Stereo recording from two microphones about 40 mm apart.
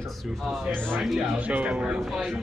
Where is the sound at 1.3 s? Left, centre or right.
Right.